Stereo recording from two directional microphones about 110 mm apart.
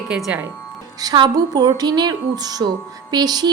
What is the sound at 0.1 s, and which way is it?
Speech, 10° right (ahead or behind).